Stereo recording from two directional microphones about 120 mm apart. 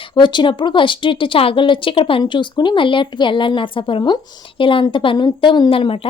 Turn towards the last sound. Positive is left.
turn(degrees=45)  # may be behind; listen again after turning